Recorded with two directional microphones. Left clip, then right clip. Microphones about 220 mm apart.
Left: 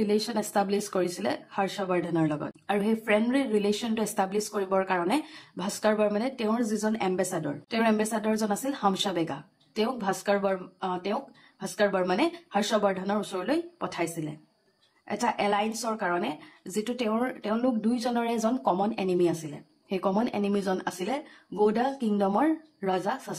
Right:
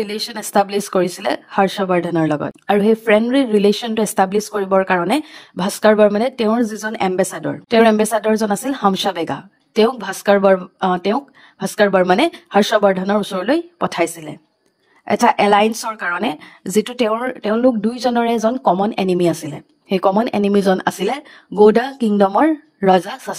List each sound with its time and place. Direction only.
0.0 s speech: 35° right (ahead or behind)